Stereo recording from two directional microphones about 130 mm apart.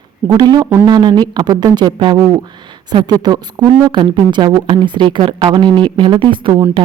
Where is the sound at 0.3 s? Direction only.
30° right (ahead or behind).